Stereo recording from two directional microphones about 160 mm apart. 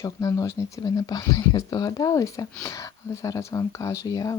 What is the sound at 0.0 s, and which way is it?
Speech, 20° left (ahead or behind).